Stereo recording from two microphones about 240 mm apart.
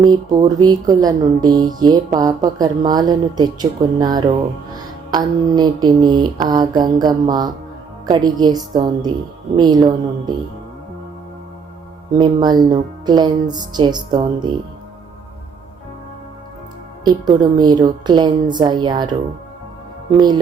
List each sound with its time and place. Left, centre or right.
0.0 s music: centre
12.2 s music: centre
17.0 s music: centre
20.1 s music: centre